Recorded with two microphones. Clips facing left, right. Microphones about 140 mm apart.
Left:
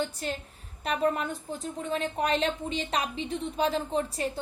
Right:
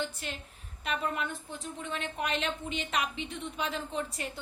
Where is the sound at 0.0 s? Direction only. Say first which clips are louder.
Left 5 dB; 35° left (ahead or behind).